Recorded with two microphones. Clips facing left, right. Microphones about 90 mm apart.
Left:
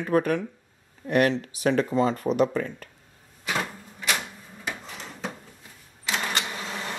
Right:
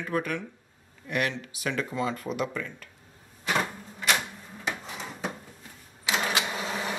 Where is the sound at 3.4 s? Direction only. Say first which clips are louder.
Right 1 dB; centre (ahead or behind).